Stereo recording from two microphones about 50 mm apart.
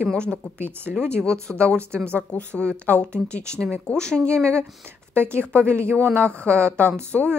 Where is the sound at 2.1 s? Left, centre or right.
Left.